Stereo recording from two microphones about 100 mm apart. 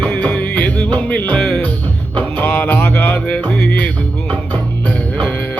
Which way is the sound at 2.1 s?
15° left (ahead or behind).